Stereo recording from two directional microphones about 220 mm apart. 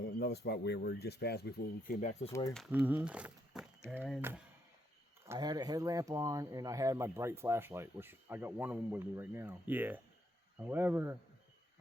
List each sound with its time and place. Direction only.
0.2 s speech: 50° left (ahead or behind)
2.5 s speech: centre (ahead or behind)
5.3 s speech: 20° right (ahead or behind)